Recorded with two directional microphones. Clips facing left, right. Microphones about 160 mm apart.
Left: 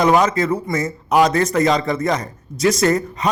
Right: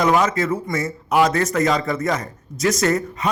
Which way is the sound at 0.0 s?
35° left (ahead or behind).